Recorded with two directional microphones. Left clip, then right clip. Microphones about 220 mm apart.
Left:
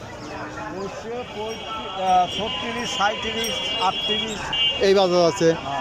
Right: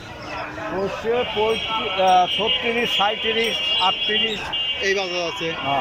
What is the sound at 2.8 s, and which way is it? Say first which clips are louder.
Speech: left 1 dB; 5° right (ahead or behind).